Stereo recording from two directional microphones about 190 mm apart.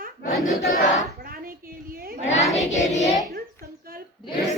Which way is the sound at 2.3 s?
35° left (ahead or behind).